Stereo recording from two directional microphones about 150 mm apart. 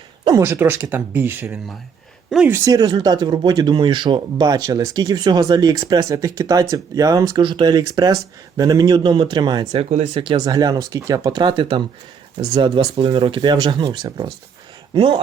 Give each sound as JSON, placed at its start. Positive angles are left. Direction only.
{"t": 0.3, "sound": "speech", "side_deg": -20}
{"t": 2.6, "sound": "speech", "side_deg": -25}
{"t": 9.7, "sound": "speech", "side_deg": -45}
{"t": 10.2, "sound": "speech", "side_deg": -25}